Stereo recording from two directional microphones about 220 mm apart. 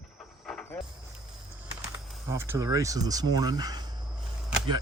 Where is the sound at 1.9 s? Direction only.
10° right (ahead or behind).